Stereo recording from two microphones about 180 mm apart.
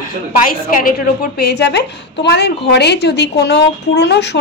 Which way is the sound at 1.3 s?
65° left (ahead or behind).